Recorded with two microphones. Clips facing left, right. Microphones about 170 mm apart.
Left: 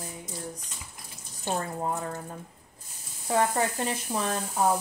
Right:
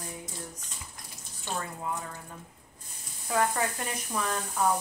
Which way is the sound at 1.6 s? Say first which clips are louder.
Left 2 dB; 40° left (ahead or behind).